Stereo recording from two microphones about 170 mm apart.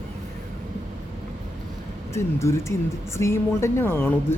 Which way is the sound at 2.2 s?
15° left (ahead or behind).